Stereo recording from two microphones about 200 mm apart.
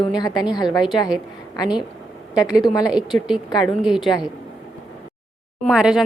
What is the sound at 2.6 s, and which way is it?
Speech, 20° left (ahead or behind).